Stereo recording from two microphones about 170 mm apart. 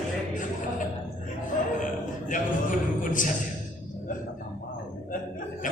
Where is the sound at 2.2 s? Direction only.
50° left (ahead or behind).